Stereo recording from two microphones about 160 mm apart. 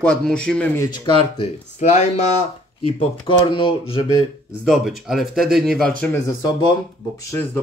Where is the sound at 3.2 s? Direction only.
30° left (ahead or behind).